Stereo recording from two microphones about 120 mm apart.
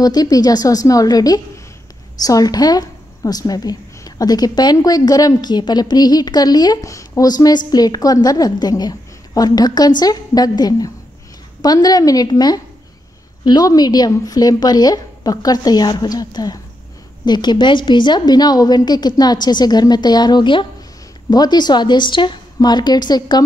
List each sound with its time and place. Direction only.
0.0 s speech: 30° left (ahead or behind)